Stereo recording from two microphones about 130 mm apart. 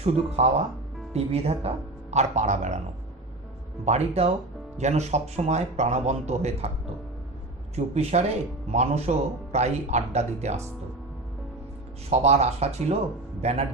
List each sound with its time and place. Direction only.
0.0 s a man's voice: 55° right (ahead or behind)
3.8 s a man's voice: 55° right (ahead or behind)
12.1 s a man's voice: 55° right (ahead or behind)